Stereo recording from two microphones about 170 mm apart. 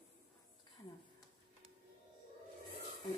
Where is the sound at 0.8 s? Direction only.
20° left (ahead or behind).